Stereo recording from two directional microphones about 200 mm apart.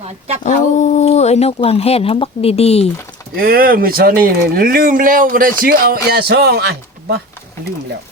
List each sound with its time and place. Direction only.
0.4 s speech: 35° left (ahead or behind)
3.3 s speech: 45° right (ahead or behind)